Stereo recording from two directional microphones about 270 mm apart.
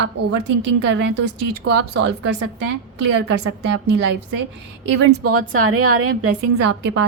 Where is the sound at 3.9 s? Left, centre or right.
Right.